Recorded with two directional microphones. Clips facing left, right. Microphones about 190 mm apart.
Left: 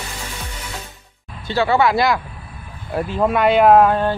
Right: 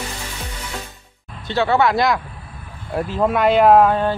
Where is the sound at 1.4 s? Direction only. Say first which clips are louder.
Left 1 dB; centre (ahead or behind).